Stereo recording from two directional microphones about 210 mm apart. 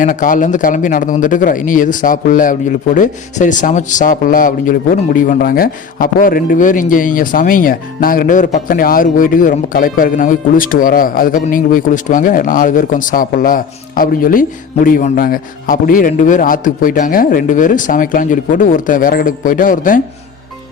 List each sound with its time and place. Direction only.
0.0 s a man's voice: 40° left (ahead or behind)